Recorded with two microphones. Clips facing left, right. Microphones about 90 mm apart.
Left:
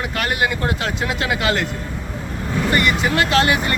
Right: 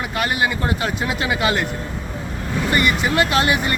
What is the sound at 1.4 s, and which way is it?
Speech, 15° right (ahead or behind).